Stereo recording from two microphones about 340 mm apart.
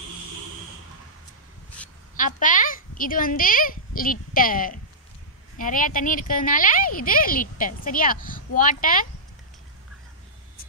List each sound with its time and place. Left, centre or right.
2.1 s speech: left